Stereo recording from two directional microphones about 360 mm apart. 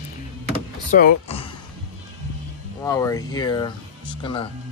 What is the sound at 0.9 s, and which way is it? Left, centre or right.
Speech, centre.